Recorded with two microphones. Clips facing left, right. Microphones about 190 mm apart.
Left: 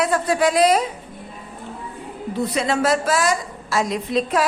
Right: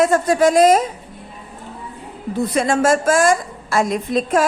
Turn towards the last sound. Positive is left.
turn(degrees=-45)  # may be behind; listen again after turning